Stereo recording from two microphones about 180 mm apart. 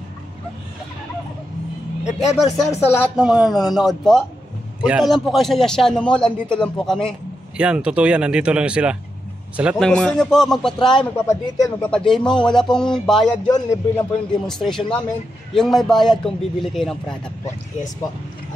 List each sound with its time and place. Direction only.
2.0 s a man's voice: centre (ahead or behind)
11.2 s speech: 15° left (ahead or behind)
12.1 s a man's voice: 5° left (ahead or behind)
13.5 s speech: 15° left (ahead or behind)
14.5 s a man's voice: 5° left (ahead or behind)